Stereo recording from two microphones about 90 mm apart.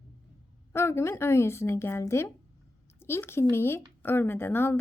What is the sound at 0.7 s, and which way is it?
A woman's voice, 30° left (ahead or behind).